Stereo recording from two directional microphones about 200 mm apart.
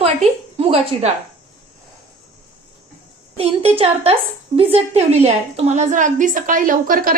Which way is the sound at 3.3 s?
30° right (ahead or behind).